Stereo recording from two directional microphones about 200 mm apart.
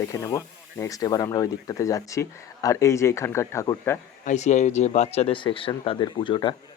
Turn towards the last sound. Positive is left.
turn(degrees=25)  # may be behind; listen again after turning